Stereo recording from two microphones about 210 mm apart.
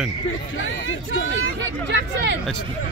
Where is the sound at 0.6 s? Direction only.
70° left (ahead or behind).